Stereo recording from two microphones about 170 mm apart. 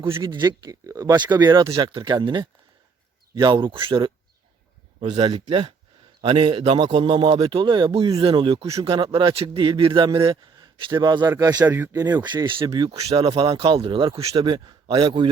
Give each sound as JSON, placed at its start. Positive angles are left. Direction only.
{"t": 0.2, "sound": "a man's voice", "side_deg": -25}